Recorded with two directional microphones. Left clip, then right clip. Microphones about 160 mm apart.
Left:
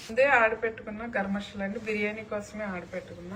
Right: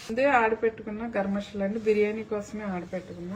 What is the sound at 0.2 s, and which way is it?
A woman's voice, 60° right (ahead or behind).